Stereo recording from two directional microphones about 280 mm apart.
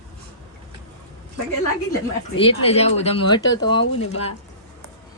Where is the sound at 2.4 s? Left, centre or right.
Left.